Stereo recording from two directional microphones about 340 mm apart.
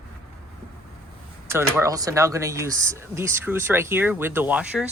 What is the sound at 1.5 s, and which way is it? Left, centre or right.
Speech, centre.